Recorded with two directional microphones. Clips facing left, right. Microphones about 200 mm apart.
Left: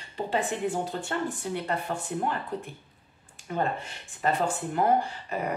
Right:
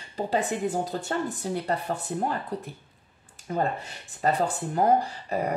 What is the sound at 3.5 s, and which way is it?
A woman's voice, 40° right (ahead or behind).